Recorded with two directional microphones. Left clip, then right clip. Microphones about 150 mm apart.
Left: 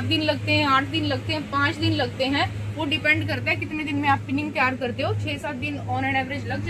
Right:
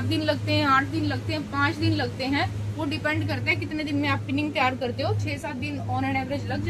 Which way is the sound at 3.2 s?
40° left (ahead or behind).